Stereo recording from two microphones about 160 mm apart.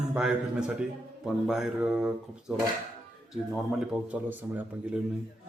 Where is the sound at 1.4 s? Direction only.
5° right (ahead or behind).